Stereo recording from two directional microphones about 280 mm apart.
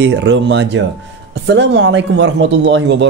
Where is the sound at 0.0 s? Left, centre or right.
Right.